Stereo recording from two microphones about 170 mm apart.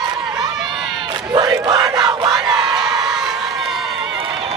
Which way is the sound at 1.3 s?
25° right (ahead or behind).